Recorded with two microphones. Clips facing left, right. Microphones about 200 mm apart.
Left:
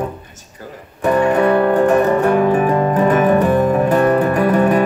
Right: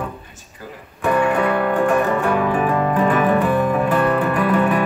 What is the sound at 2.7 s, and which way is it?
Music, 30° left (ahead or behind).